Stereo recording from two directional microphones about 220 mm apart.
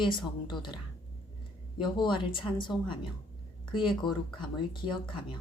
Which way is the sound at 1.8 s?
20° left (ahead or behind).